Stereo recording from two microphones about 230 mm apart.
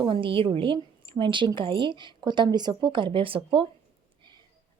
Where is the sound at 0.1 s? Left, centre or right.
Right.